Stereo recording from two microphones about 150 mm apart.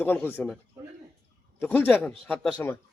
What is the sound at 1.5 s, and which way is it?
A man's voice, 10° left (ahead or behind).